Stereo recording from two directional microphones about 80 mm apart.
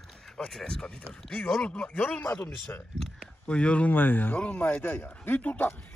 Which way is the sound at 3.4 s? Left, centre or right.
Centre.